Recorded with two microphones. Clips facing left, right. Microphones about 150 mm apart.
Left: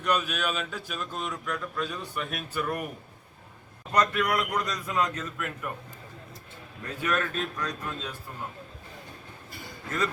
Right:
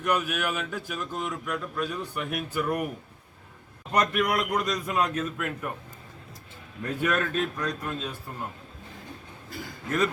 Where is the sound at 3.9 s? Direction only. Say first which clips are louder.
Right 1 dB; 20° right (ahead or behind).